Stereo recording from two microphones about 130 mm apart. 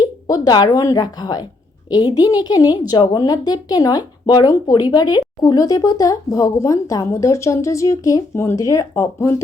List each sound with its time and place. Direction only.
0.0 s a woman's voice: 30° left (ahead or behind)